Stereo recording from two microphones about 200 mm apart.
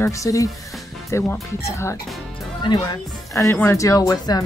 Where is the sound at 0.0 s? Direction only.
15° left (ahead or behind).